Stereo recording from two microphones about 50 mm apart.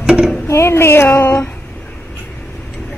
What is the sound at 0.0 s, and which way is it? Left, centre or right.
Speech, centre.